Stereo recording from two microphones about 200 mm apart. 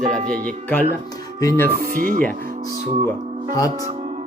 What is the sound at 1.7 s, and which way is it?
Speech, 45° right (ahead or behind).